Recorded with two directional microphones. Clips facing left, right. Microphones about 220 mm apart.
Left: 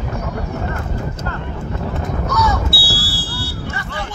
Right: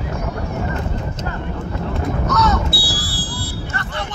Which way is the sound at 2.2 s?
10° left (ahead or behind).